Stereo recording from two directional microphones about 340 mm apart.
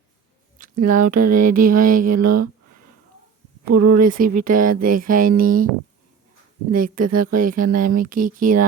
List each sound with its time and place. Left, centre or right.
0.6 s speech: right
3.7 s speech: right
4.0 s speech: right
7.0 s speech: right